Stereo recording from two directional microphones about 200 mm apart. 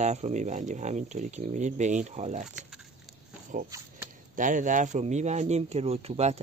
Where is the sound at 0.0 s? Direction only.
35° right (ahead or behind).